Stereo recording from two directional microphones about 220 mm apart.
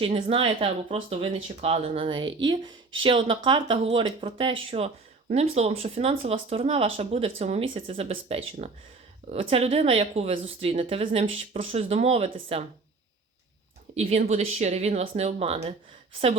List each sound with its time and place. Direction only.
0.0 s speech: 25° right (ahead or behind)
13.9 s speech: 30° right (ahead or behind)